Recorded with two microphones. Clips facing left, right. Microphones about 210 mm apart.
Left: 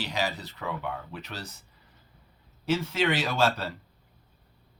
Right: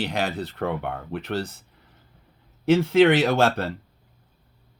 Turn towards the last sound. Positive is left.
turn(degrees=-55)  # may be behind; listen again after turning